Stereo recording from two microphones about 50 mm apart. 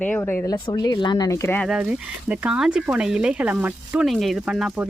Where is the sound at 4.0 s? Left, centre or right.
Centre.